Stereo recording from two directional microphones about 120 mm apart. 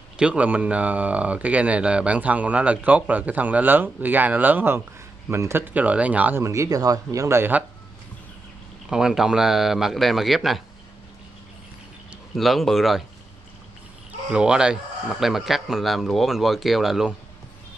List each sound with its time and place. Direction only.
0.2 s speech: 10° right (ahead or behind)
6.4 s speech: 25° right (ahead or behind)
8.8 s speech: 5° right (ahead or behind)
12.4 s speech: centre (ahead or behind)
14.3 s speech: 5° right (ahead or behind)